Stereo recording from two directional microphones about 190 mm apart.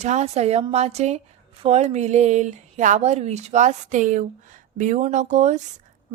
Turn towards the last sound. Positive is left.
turn(degrees=-40)  # may be behind; listen again after turning